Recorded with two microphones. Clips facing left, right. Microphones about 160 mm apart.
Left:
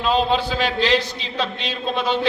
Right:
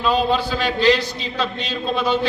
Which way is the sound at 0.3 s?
45° right (ahead or behind).